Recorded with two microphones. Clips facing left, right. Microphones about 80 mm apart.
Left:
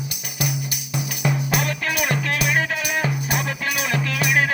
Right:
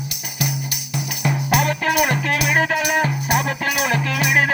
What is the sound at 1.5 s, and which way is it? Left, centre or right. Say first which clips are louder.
Music: right 5 dB; right.